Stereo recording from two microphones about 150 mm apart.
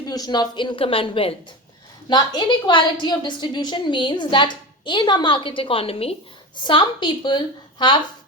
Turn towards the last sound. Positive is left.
turn(degrees=30)  # may be behind; listen again after turning